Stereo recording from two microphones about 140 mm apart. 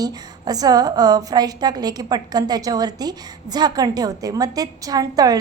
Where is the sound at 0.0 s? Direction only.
25° right (ahead or behind).